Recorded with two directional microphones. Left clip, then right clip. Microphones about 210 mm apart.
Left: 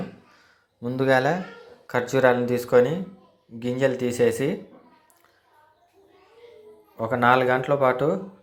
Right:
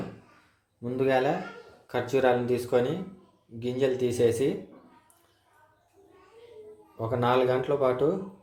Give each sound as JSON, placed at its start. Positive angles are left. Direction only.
{"t": 0.8, "sound": "a man's voice", "side_deg": 10}
{"t": 7.0, "sound": "a man's voice", "side_deg": 10}